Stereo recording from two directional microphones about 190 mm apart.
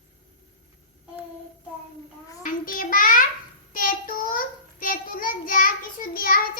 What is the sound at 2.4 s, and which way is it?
Child singing, 45° left (ahead or behind).